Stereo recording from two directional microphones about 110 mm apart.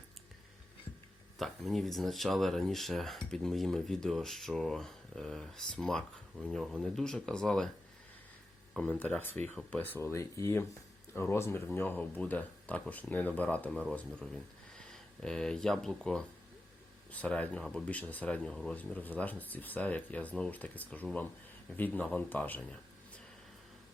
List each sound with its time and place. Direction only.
1.4 s speech: centre (ahead or behind)
8.8 s speech: 15° left (ahead or behind)
17.9 s a man's voice: 15° left (ahead or behind)